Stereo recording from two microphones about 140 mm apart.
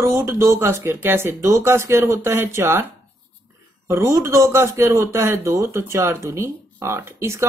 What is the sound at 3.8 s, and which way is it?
A man's voice, 20° right (ahead or behind).